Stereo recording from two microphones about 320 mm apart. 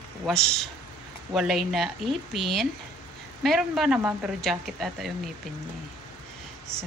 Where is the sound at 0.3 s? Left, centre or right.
Centre.